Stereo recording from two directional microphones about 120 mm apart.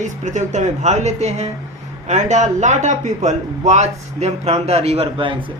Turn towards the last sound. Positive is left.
turn(degrees=-45)  # may be behind; listen again after turning